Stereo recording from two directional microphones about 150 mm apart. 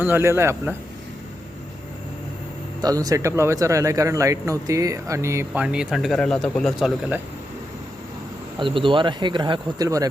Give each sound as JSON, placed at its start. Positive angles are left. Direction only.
{"t": 0.0, "sound": "speech", "side_deg": -15}
{"t": 2.8, "sound": "speech", "side_deg": -25}
{"t": 5.6, "sound": "speech", "side_deg": -5}
{"t": 8.5, "sound": "speech", "side_deg": -35}